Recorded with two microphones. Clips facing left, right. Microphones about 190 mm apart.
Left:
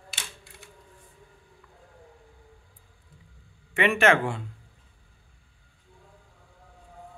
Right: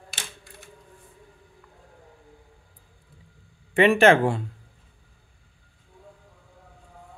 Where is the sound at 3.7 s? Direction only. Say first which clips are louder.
Right 5 dB; 35° right (ahead or behind).